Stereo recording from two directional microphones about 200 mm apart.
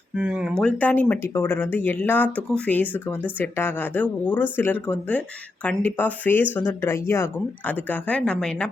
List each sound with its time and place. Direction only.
0.1 s speech: 5° right (ahead or behind)
0.7 s speech: 10° left (ahead or behind)